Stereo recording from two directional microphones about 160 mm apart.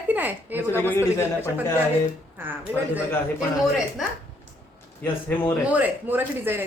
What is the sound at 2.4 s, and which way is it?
Speech, 10° right (ahead or behind).